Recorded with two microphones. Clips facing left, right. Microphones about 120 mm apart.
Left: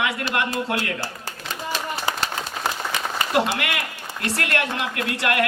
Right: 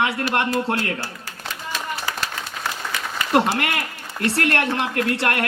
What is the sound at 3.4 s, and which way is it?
Speech, 35° right (ahead or behind).